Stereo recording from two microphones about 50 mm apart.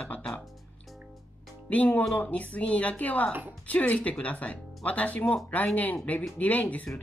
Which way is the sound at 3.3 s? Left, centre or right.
Right.